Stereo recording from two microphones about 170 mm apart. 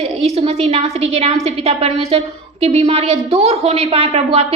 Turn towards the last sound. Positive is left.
turn(degrees=-35)  # may be behind; listen again after turning